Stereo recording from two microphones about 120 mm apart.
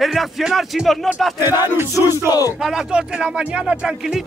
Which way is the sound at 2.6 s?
5° right (ahead or behind).